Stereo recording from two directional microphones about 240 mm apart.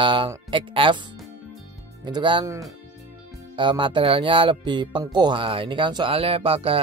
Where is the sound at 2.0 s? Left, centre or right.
Centre.